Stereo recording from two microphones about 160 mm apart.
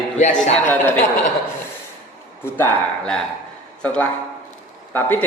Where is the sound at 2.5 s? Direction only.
15° left (ahead or behind).